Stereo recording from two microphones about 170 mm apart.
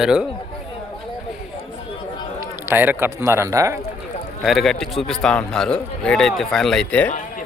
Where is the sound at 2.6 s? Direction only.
10° right (ahead or behind).